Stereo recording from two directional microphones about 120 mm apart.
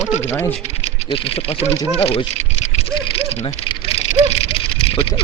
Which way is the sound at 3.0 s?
55° left (ahead or behind).